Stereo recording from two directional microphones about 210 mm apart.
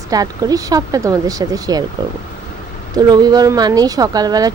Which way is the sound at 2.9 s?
20° right (ahead or behind).